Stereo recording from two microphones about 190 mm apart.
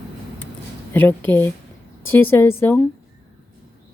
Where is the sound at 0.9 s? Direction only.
10° left (ahead or behind).